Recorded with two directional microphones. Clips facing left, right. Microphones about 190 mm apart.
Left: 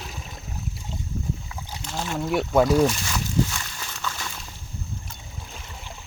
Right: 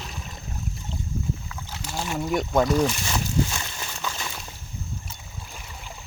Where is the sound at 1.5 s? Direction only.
15° left (ahead or behind).